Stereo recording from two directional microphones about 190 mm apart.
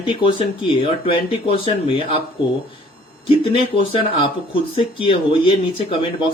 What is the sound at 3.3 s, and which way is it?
Speech, 25° left (ahead or behind).